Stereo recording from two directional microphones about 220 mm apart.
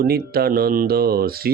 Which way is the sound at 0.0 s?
45° right (ahead or behind).